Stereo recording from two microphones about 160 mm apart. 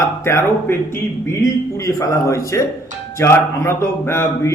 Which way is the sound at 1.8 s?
20° left (ahead or behind).